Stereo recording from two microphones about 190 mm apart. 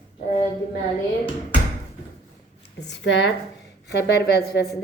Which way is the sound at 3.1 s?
65° left (ahead or behind).